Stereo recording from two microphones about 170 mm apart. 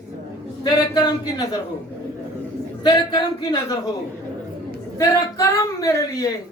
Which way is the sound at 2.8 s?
25° left (ahead or behind).